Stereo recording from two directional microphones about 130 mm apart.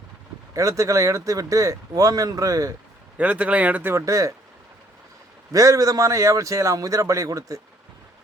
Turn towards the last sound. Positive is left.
turn(degrees=-25)  # may be behind; listen again after turning